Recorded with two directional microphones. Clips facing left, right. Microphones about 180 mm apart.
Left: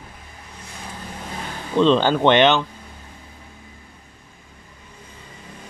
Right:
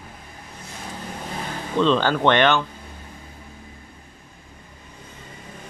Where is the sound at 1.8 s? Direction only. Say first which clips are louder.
Left 3 dB; 30° left (ahead or behind).